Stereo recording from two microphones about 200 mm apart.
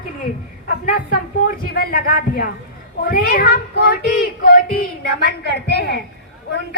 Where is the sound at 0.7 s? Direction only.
45° left (ahead or behind).